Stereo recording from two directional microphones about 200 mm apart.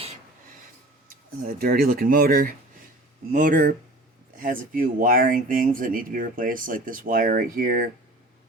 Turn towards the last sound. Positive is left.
turn(degrees=-45)  # may be behind; listen again after turning